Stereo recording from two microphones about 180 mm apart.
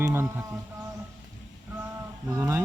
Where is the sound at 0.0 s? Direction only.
15° right (ahead or behind).